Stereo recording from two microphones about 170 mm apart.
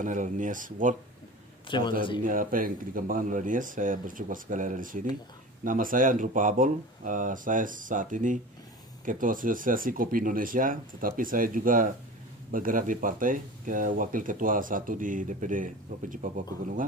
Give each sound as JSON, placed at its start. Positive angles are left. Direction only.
{"t": 0.0, "sound": "speech", "side_deg": -50}
{"t": 1.7, "sound": "a man's voice", "side_deg": 25}
{"t": 2.2, "sound": "speech", "side_deg": -55}